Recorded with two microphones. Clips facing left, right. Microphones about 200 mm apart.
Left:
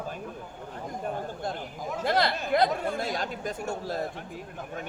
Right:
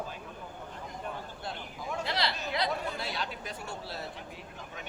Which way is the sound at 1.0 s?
45° left (ahead or behind).